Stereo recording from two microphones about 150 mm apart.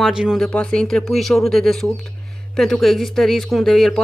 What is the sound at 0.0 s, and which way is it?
Speech, 5° right (ahead or behind).